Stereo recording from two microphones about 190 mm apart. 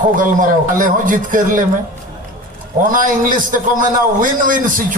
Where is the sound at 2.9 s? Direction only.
45° right (ahead or behind).